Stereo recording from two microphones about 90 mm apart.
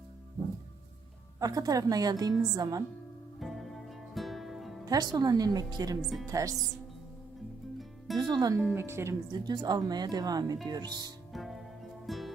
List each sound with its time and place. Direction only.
1.4 s a woman's voice: 40° right (ahead or behind)
3.4 s music: centre (ahead or behind)
4.9 s a woman's voice: 50° right (ahead or behind)
6.0 s speech: 5° right (ahead or behind)
6.3 s speech: 40° right (ahead or behind)
8.1 s a woman's voice: 50° right (ahead or behind)
8.7 s speech: 30° right (ahead or behind)
9.6 s a woman's voice: 50° right (ahead or behind)
11.3 s music: centre (ahead or behind)